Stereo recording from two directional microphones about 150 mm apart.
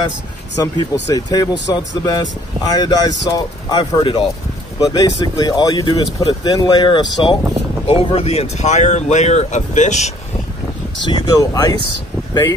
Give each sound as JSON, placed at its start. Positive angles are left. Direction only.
{"t": 0.7, "sound": "speech", "side_deg": 25}
{"t": 11.1, "sound": "speech", "side_deg": 25}